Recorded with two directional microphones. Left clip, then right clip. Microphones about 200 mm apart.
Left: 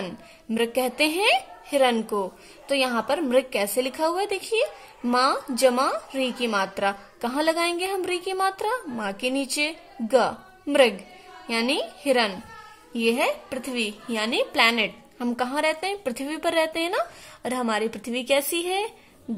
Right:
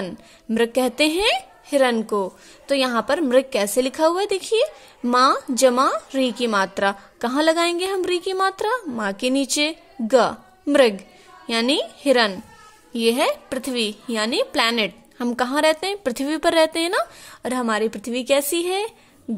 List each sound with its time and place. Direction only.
0.0 s a woman's voice: 30° right (ahead or behind)